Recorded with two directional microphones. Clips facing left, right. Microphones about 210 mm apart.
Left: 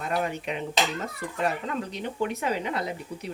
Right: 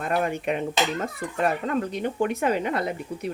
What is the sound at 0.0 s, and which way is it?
A child's voice, 50° right (ahead or behind).